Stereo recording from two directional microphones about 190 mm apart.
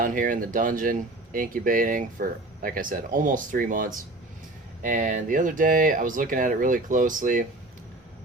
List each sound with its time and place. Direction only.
0.0 s speech: 45° right (ahead or behind)